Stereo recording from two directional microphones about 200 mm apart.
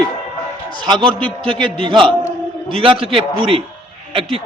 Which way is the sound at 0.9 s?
25° right (ahead or behind).